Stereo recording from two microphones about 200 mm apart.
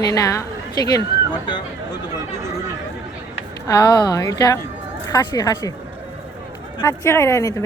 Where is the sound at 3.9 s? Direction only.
20° left (ahead or behind).